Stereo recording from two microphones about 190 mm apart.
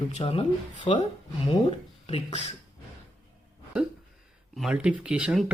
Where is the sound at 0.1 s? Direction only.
30° left (ahead or behind).